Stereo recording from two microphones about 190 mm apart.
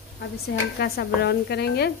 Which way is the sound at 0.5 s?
55° left (ahead or behind).